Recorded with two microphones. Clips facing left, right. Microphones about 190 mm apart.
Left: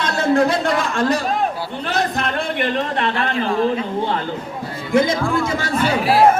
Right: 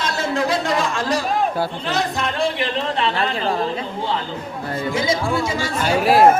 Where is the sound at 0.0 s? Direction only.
55° left (ahead or behind).